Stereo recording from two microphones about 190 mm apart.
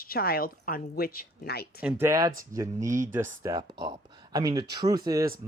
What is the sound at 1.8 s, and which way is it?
Speech, 15° right (ahead or behind).